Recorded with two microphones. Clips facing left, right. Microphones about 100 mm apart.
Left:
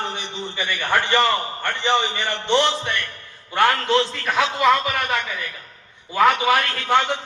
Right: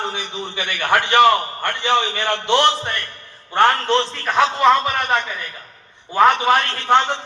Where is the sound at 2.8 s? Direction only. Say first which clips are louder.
Even; 40° right (ahead or behind).